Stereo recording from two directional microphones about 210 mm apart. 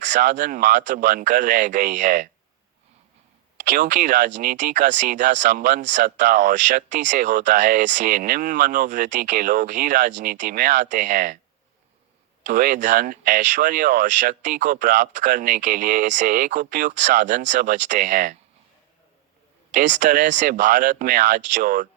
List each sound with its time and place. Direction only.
0.0 s speech: 35° right (ahead or behind)
3.6 s speech: 35° right (ahead or behind)
12.5 s speech: 40° right (ahead or behind)
19.7 s speech: 35° right (ahead or behind)